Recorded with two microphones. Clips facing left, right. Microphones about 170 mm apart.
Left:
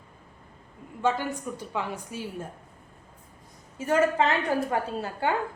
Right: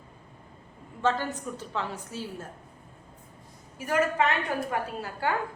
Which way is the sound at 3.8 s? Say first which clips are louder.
Left 3 dB; 30° left (ahead or behind).